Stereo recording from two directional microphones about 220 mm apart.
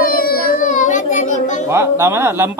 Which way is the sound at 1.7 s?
10° right (ahead or behind).